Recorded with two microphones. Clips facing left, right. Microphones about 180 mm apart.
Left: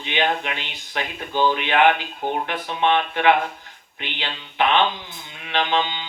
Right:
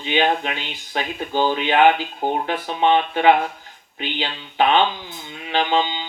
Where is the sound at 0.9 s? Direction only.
40° right (ahead or behind).